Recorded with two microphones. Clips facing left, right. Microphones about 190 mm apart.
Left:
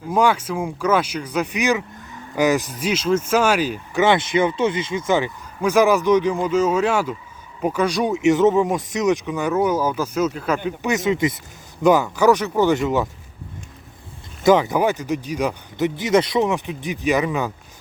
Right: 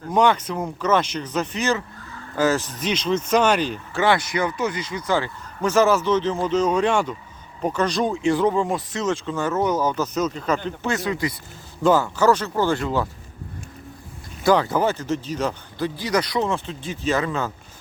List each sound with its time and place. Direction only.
0.0 s speech: 5° left (ahead or behind)
4.0 s speech: 25° left (ahead or behind)
14.4 s speech: 15° left (ahead or behind)